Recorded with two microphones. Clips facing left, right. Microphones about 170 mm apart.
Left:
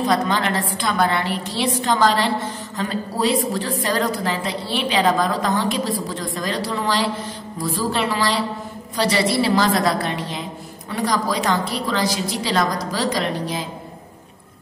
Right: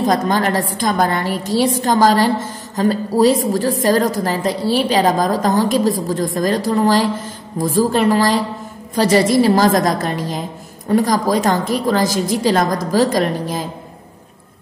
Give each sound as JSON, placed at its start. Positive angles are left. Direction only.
{"t": 0.0, "sound": "a woman's voice", "side_deg": -45}